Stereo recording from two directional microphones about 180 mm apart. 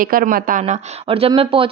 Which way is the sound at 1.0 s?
30° right (ahead or behind).